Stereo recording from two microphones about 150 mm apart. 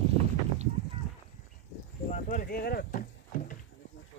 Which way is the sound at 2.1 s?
60° left (ahead or behind).